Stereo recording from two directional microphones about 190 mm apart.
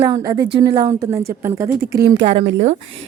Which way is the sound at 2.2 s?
30° right (ahead or behind).